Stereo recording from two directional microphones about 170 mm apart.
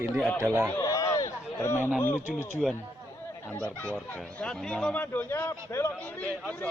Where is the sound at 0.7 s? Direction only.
20° left (ahead or behind).